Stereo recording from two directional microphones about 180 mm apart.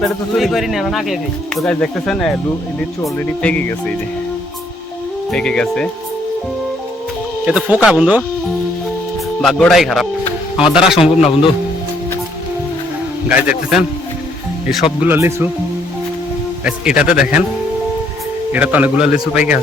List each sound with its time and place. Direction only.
0.3 s speech: centre (ahead or behind)
5.3 s speech: 5° left (ahead or behind)
7.4 s speech: 5° right (ahead or behind)
9.4 s speech: centre (ahead or behind)
11.2 s speech: 35° left (ahead or behind)
13.2 s a man's voice: 5° right (ahead or behind)
15.0 s a man's voice: 10° right (ahead or behind)
16.6 s a man's voice: 5° right (ahead or behind)
18.5 s a man's voice: 10° right (ahead or behind)